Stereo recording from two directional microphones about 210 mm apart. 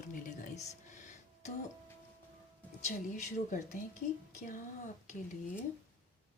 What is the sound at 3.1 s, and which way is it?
Speech, 35° left (ahead or behind).